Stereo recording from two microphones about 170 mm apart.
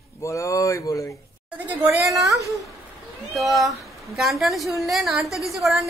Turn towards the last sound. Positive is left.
turn(degrees=0)  # may be behind; listen again after turning